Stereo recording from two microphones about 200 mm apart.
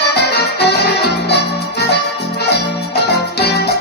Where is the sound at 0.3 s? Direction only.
55° left (ahead or behind).